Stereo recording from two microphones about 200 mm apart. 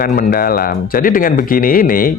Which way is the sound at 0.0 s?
45° left (ahead or behind).